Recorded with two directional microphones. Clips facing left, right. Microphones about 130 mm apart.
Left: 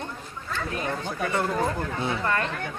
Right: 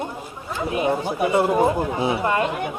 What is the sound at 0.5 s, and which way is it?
Speech, 15° right (ahead or behind).